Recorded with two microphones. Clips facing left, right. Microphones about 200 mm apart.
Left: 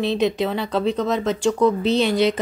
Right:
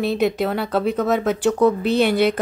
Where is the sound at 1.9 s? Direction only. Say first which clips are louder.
Right 1 dB; 55° right (ahead or behind).